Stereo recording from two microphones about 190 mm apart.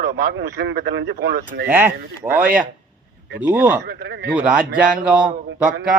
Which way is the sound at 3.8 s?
60° right (ahead or behind).